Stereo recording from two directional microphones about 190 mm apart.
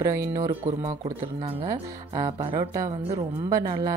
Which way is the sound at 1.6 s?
25° right (ahead or behind).